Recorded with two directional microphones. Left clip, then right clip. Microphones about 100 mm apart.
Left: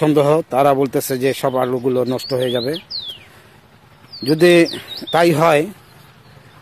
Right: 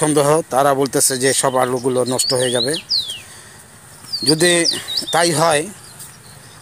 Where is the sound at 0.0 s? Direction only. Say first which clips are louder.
Left 1 dB; 65° left (ahead or behind); by 3.1 s 45° left (ahead or behind).